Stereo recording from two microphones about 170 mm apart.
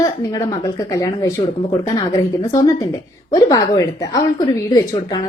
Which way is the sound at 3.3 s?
20° left (ahead or behind).